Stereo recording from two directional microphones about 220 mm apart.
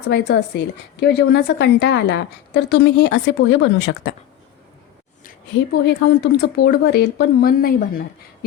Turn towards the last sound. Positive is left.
turn(degrees=40)  # may be behind; listen again after turning